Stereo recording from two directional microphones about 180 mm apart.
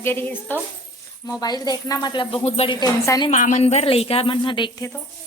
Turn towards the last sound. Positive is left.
turn(degrees=25)  # may be behind; listen again after turning